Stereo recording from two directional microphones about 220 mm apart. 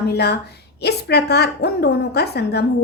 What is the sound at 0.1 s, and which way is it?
A woman's voice, 50° left (ahead or behind).